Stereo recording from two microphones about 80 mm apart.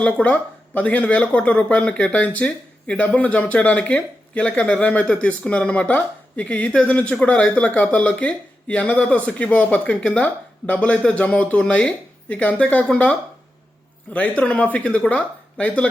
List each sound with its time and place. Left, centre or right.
0.0 s speech: centre